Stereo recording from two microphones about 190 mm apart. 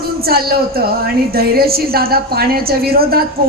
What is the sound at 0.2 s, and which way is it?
A woman's voice, 55° right (ahead or behind).